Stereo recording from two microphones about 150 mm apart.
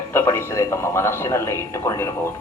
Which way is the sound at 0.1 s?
15° left (ahead or behind).